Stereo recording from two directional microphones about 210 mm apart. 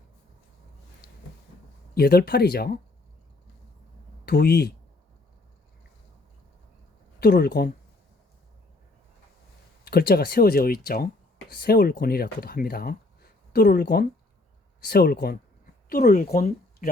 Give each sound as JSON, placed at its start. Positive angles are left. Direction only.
{"t": 2.0, "sound": "speech", "side_deg": 50}
{"t": 4.3, "sound": "speech", "side_deg": 50}
{"t": 7.2, "sound": "speech", "side_deg": 50}
{"t": 9.8, "sound": "speech", "side_deg": 45}